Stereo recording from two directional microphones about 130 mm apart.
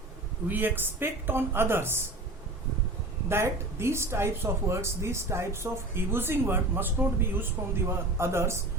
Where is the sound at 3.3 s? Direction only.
20° right (ahead or behind).